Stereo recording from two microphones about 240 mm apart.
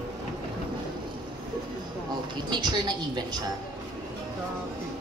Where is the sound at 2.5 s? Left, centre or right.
Centre.